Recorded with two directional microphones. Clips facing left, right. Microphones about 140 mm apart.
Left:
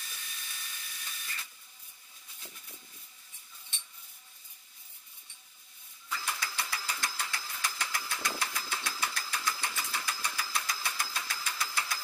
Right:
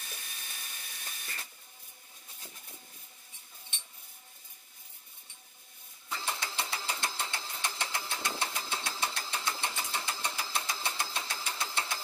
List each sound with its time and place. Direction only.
0.1 s steam: 45° right (ahead or behind)
6.0 s engine: 25° right (ahead or behind)